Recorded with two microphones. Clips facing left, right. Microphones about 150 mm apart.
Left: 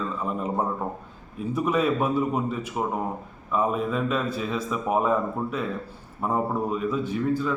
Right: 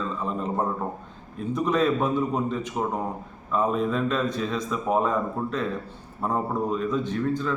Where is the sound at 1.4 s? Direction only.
10° left (ahead or behind).